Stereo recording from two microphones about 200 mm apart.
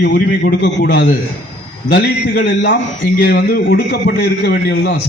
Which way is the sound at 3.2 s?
50° left (ahead or behind).